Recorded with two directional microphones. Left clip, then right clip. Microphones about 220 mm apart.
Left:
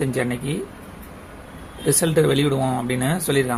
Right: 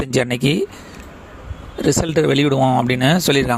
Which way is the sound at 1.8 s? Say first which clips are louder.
Right 2 dB; 40° right (ahead or behind).